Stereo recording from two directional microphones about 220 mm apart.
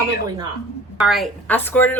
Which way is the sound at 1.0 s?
Centre (ahead or behind).